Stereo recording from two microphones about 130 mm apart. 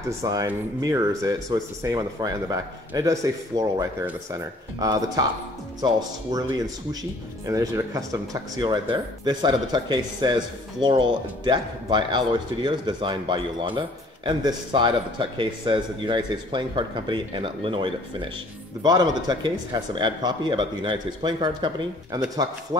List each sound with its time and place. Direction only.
0.2 s speech: 25° right (ahead or behind)
18.8 s speech: 30° right (ahead or behind)